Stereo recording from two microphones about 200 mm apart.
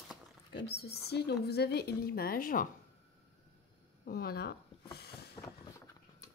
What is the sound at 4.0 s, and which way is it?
Speech, 50° left (ahead or behind).